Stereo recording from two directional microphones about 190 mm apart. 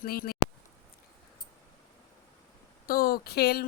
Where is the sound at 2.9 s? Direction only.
50° left (ahead or behind).